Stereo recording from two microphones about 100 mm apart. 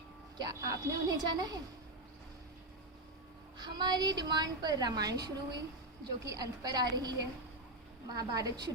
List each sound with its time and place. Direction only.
0.3 s a woman's voice: 40° right (ahead or behind)
3.6 s a woman's voice: 45° right (ahead or behind)